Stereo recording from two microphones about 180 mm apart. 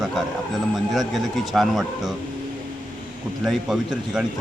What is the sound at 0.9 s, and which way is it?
A man's voice, centre (ahead or behind).